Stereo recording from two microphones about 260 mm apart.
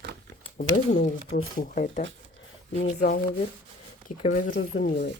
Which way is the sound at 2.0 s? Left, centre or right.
Right.